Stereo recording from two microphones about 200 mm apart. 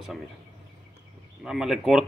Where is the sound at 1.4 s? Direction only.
Centre (ahead or behind).